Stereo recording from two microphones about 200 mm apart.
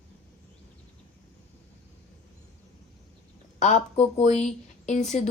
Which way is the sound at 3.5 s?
35° left (ahead or behind).